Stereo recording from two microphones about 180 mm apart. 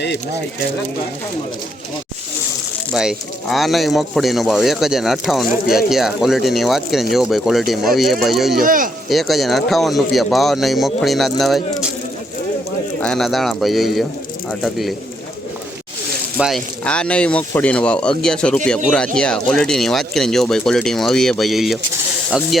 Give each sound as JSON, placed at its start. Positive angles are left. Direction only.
{"t": 2.9, "sound": "speech", "side_deg": -5}
{"t": 8.6, "sound": "speech", "side_deg": -50}
{"t": 9.0, "sound": "speech", "side_deg": 0}
{"t": 13.0, "sound": "speech", "side_deg": 5}
{"t": 16.4, "sound": "speech", "side_deg": 0}